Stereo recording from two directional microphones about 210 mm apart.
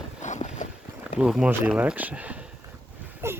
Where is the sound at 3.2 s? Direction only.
10° right (ahead or behind).